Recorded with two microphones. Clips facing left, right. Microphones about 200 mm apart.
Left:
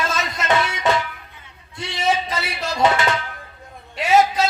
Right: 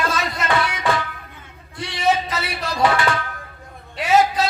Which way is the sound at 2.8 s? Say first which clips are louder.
Even; 25° left (ahead or behind).